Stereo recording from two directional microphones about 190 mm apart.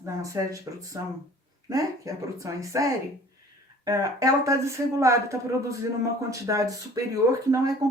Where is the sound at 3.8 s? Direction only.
20° right (ahead or behind).